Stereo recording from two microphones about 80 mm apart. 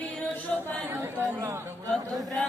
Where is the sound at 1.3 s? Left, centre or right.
Right.